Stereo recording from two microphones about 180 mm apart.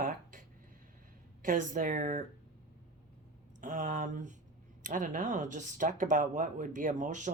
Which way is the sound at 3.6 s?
45° right (ahead or behind).